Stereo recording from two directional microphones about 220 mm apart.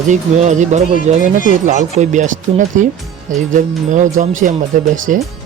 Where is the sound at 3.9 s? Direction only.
35° right (ahead or behind).